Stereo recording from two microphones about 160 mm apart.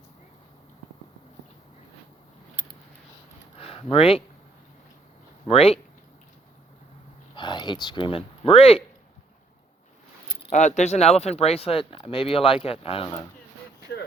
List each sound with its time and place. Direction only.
3.6 s a sound: 35° left (ahead or behind)
5.5 s speech: 40° left (ahead or behind)
7.3 s speech: 30° left (ahead or behind)
10.5 s speech: 50° left (ahead or behind)